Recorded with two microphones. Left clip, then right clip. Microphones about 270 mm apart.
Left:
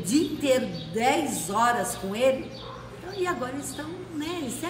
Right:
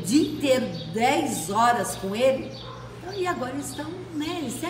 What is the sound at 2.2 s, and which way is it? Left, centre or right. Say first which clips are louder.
Speech: right 1 dB; centre.